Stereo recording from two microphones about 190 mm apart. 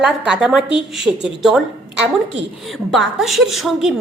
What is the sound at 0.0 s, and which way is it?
A woman's voice, 5° right (ahead or behind).